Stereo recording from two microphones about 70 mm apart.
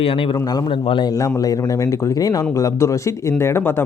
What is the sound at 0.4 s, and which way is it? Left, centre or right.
Speech, left.